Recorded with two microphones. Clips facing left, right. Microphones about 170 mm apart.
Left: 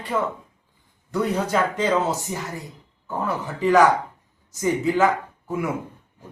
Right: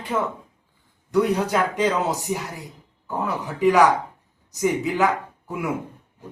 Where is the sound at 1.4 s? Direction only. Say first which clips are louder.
Right 1 dB; 10° right (ahead or behind).